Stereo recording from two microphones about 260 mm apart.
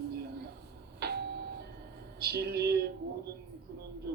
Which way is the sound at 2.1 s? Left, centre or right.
Right.